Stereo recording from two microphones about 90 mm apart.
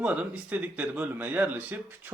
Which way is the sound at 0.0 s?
15° right (ahead or behind).